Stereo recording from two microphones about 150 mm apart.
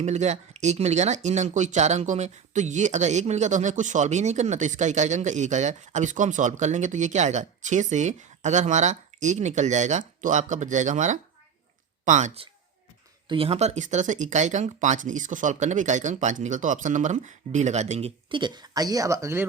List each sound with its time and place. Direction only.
0.0 s speech: 50° right (ahead or behind)
13.2 s speech: 40° right (ahead or behind)
18.3 s speech: 30° right (ahead or behind)